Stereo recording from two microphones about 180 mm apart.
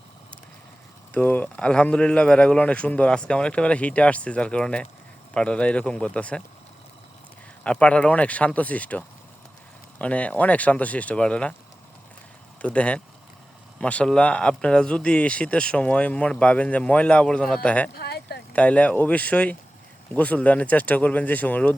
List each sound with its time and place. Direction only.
1.1 s speech: 10° left (ahead or behind)
7.6 s speech: 5° left (ahead or behind)
12.6 s speech: 5° left (ahead or behind)
17.9 s a sound: 65° left (ahead or behind)
18.5 s speech: 5° left (ahead or behind)